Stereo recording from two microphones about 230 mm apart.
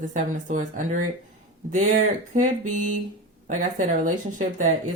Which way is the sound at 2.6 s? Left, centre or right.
Right.